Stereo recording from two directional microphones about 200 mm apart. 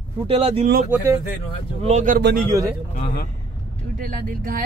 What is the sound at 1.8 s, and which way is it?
Speech, 35° right (ahead or behind).